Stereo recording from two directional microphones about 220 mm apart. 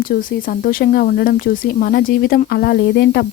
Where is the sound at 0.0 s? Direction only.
40° left (ahead or behind).